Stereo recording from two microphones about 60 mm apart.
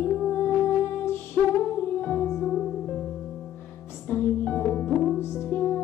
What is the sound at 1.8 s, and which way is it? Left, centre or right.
Music, left.